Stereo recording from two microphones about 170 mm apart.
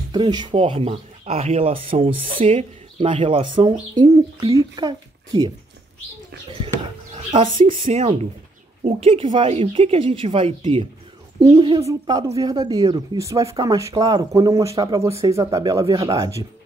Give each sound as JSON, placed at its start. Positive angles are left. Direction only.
{"t": 0.1, "sound": "speech", "side_deg": -25}
{"t": 7.3, "sound": "speech", "side_deg": -30}